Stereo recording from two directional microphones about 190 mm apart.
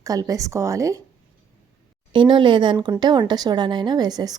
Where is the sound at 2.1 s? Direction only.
25° right (ahead or behind).